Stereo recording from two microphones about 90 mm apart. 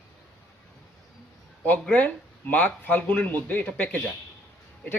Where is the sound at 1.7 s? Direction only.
15° left (ahead or behind).